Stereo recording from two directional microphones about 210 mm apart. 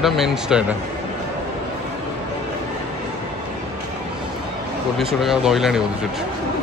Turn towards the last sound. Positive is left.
turn(degrees=0)  # may be behind; listen again after turning